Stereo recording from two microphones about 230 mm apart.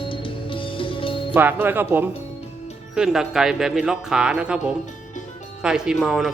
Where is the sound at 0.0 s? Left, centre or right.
Left.